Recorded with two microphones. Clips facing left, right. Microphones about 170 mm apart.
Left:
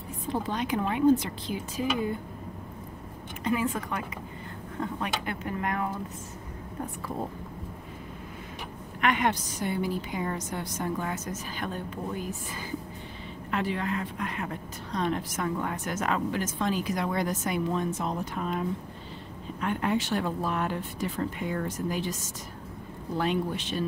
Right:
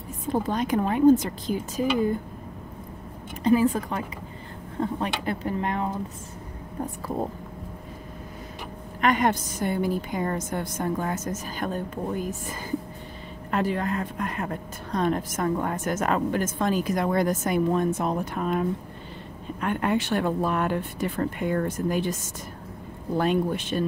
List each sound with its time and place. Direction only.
0.3 s a woman's voice: 45° right (ahead or behind)
3.4 s speech: 35° right (ahead or behind)
9.0 s a woman's voice: 40° right (ahead or behind)
19.6 s speech: 55° right (ahead or behind)
23.1 s a woman's voice: 50° right (ahead or behind)